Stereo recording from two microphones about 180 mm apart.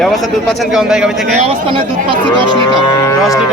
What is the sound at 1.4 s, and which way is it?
Speech, 30° right (ahead or behind).